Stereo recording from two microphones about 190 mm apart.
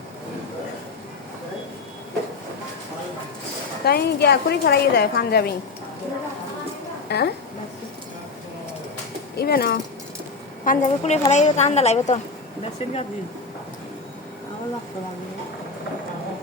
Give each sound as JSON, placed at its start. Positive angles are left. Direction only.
{"t": 3.8, "sound": "a woman's voice", "side_deg": 60}
{"t": 7.1, "sound": "a woman's voice", "side_deg": 60}
{"t": 9.3, "sound": "a woman's voice", "side_deg": 55}
{"t": 10.7, "sound": "a woman's voice", "side_deg": 35}